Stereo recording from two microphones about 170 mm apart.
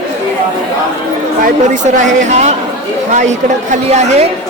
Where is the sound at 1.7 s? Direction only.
45° right (ahead or behind).